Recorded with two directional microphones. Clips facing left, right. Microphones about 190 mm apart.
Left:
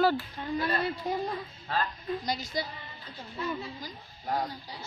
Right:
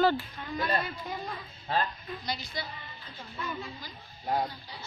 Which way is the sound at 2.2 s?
40° left (ahead or behind).